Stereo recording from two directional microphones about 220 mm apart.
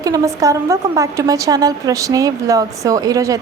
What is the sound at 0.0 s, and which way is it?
A woman's voice, 15° right (ahead or behind).